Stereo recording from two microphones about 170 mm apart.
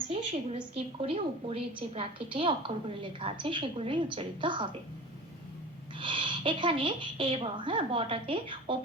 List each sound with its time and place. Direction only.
0.1 s a woman's voice: 30° right (ahead or behind)
6.0 s a woman's voice: 30° right (ahead or behind)